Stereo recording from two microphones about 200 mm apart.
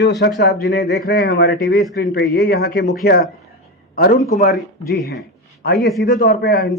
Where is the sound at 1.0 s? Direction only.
50° left (ahead or behind).